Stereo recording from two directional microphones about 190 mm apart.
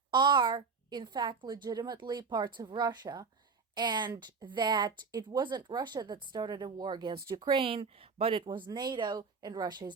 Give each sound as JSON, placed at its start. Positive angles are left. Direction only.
{"t": 0.1, "sound": "a woman's voice", "side_deg": -25}